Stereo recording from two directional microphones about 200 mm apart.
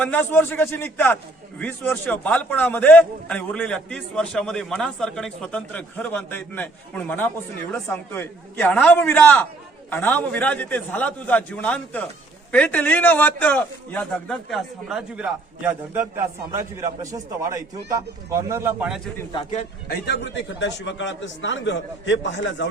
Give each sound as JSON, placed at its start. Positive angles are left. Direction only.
{"t": 0.0, "sound": "a man's voice", "side_deg": 10}
{"t": 19.9, "sound": "a man's voice", "side_deg": 60}